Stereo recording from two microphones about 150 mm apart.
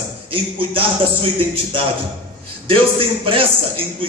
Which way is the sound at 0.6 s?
40° right (ahead or behind).